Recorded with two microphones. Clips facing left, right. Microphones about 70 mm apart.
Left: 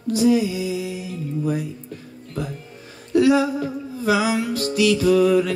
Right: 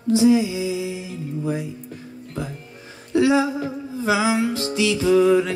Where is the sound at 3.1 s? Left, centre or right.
Right.